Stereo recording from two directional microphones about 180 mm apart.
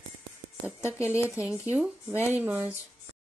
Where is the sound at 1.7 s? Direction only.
10° right (ahead or behind).